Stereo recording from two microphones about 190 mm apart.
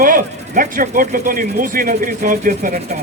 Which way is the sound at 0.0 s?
45° right (ahead or behind).